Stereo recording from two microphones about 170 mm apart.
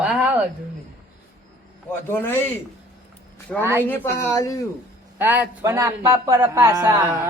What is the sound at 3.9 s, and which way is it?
Speech, 15° left (ahead or behind).